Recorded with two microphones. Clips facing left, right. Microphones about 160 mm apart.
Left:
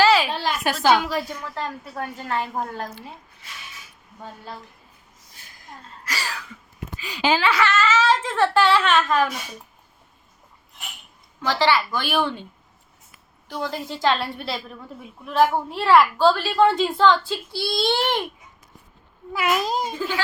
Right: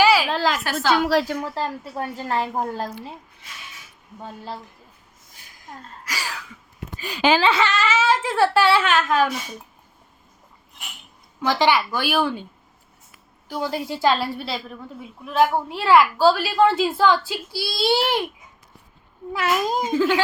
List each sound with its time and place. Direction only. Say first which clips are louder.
0.0 s a sound: even; 10° right (ahead or behind)
0.3 s a sound: right 4 dB; 90° right
0.6 s a woman's voice: left 3 dB; 15° left (ahead or behind)
1.0 s a woman's voice: right 7 dB; 85° right
1.5 s a woman's voice: right 3 dB; 30° right (ahead or behind)
6.1 s a sound: left 1 dB; 10° right (ahead or behind)
7.0 s speech: right 3 dB; 50° right (ahead or behind)
7.4 s speech: right 1 dB; 25° right (ahead or behind)
7.7 s speech: left 1 dB; 10° right (ahead or behind)
11.4 s speech: right 1 dB; 15° right (ahead or behind)
13.5 s a woman's voice: right 3 dB; 5° right (ahead or behind)
19.9 s speech: right 8 dB; 90° right